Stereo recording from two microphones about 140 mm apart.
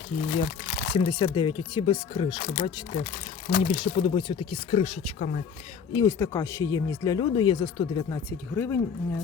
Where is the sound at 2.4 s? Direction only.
65° left (ahead or behind).